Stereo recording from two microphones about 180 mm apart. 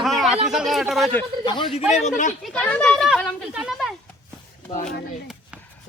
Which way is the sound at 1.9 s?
40° left (ahead or behind).